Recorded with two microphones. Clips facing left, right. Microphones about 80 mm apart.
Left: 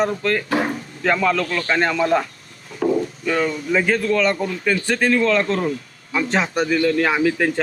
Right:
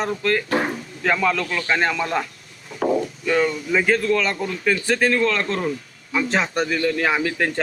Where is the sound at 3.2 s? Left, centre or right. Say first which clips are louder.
Right 1 dB; centre.